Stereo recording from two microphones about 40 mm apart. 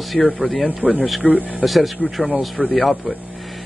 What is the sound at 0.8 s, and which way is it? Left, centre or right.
Speech, right.